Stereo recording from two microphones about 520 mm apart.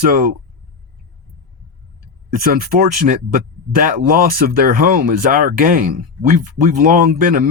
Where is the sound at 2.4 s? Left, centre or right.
Centre.